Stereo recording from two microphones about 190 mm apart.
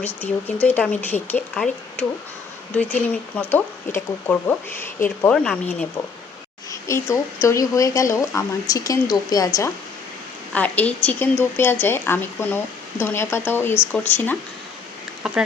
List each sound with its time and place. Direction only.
0.2 s a woman's voice: 10° left (ahead or behind)
6.7 s a woman's voice: 15° left (ahead or behind)